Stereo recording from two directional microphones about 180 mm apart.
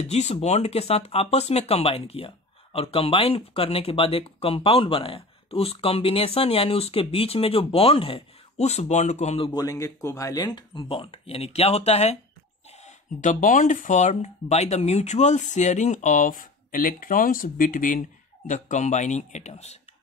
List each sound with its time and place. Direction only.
0.0 s speech: 35° left (ahead or behind)
9.5 s speech: 20° left (ahead or behind); by 19.8 s 35° left (ahead or behind)